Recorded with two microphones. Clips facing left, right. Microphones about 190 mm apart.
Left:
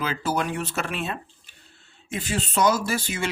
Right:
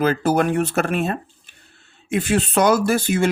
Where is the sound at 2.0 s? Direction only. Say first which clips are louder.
Right 9 dB; 65° right (ahead or behind).